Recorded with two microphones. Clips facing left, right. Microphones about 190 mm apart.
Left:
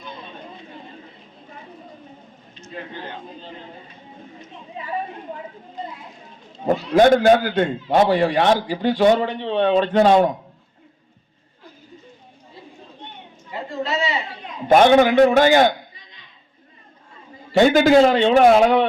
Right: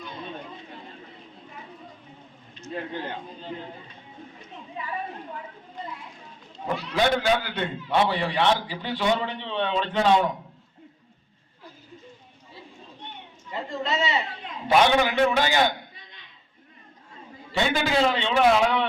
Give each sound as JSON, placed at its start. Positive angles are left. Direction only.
{"t": 6.7, "sound": "a man's voice", "side_deg": 45}
{"t": 13.5, "sound": "a sound", "side_deg": 5}
{"t": 14.7, "sound": "a man's voice", "side_deg": 50}
{"t": 17.5, "sound": "a man's voice", "side_deg": 45}